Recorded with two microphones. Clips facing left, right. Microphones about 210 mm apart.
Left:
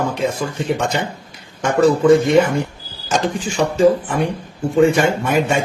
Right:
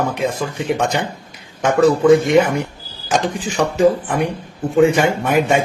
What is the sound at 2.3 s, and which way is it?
Speech, 20° right (ahead or behind).